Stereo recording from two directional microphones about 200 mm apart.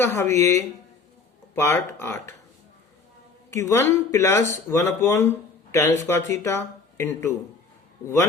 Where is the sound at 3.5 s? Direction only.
15° left (ahead or behind).